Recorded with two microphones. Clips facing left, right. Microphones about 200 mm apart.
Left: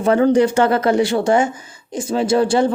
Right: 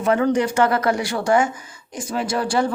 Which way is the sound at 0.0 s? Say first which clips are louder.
Left 5 dB; 30° left (ahead or behind).